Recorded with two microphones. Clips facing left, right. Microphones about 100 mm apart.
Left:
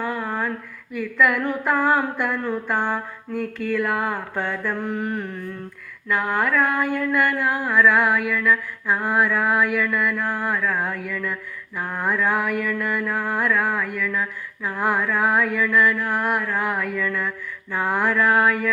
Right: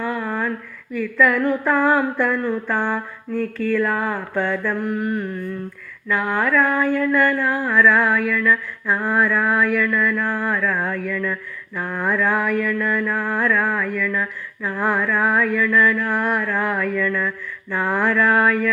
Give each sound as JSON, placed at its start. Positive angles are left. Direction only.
{"t": 0.0, "sound": "female singing", "side_deg": 15}
{"t": 0.9, "sound": "mantra", "side_deg": 20}
{"t": 6.2, "sound": "mantra", "side_deg": 20}